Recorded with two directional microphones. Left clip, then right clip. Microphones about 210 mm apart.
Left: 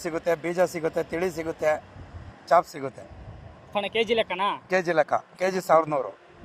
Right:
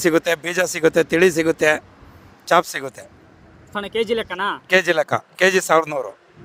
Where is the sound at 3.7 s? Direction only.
25° right (ahead or behind).